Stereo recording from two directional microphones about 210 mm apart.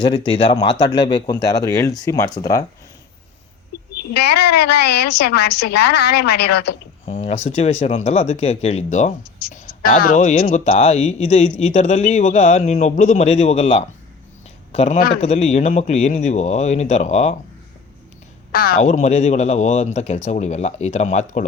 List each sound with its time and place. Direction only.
0.3 s speech: 20° left (ahead or behind)
3.9 s a woman's voice: 50° left (ahead or behind)
7.0 s speech: 30° left (ahead or behind)
14.7 s a sound: 30° left (ahead or behind)
15.2 s speech: 30° left (ahead or behind)
18.5 s speech: 45° left (ahead or behind)